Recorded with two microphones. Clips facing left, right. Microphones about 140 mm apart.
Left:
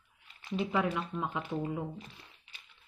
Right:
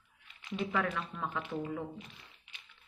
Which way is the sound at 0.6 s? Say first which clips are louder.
Left 2 dB; 15° left (ahead or behind).